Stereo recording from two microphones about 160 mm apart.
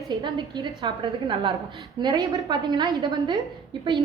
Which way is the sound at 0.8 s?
35° right (ahead or behind).